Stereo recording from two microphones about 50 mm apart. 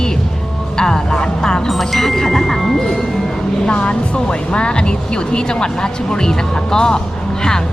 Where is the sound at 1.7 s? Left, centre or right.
Centre.